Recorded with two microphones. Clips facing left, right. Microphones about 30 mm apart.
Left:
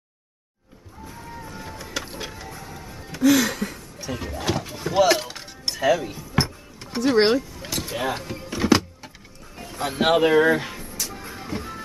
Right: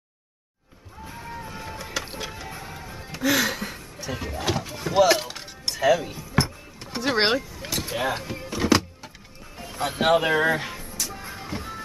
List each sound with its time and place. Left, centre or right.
1.0 s music: centre
2.4 s music: right; by 7.2 s centre
7.2 s power windows: centre
9.6 s speech: centre
10.9 s vehicle: centre